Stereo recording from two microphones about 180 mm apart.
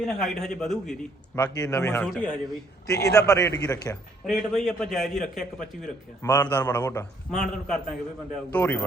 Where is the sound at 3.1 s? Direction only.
20° left (ahead or behind).